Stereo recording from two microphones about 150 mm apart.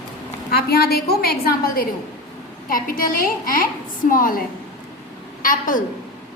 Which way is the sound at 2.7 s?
70° left (ahead or behind).